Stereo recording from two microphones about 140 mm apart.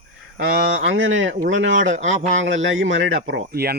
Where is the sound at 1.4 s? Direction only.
60° right (ahead or behind).